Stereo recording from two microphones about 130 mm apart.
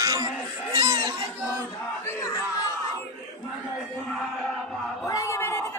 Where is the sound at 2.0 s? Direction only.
25° left (ahead or behind).